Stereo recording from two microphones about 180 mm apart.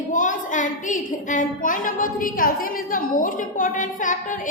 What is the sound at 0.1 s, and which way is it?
A child's voice, 45° left (ahead or behind).